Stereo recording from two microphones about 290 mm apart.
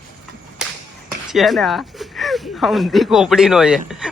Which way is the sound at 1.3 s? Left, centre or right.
Centre.